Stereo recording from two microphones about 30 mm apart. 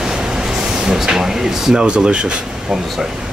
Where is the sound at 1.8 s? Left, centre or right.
Right.